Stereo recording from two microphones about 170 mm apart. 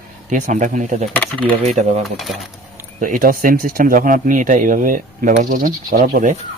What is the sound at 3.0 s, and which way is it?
Speech, 55° right (ahead or behind).